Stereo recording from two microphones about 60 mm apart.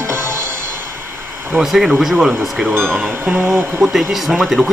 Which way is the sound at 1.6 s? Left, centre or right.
Centre.